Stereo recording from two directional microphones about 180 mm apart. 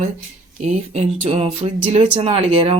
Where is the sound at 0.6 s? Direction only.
35° right (ahead or behind).